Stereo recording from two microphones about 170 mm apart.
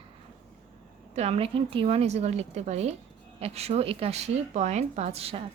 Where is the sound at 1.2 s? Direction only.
35° right (ahead or behind).